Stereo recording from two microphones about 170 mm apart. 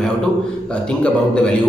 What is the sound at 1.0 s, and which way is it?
Speech, 5° left (ahead or behind).